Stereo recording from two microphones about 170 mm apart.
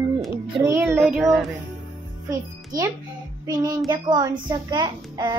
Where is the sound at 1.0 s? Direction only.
Centre (ahead or behind).